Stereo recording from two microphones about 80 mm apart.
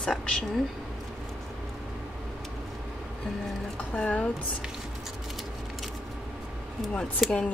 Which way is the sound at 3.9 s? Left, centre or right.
Centre.